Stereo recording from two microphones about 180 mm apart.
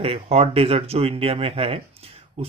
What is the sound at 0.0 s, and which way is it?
Speech, 35° right (ahead or behind).